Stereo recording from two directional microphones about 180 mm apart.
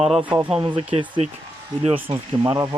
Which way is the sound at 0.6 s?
25° right (ahead or behind).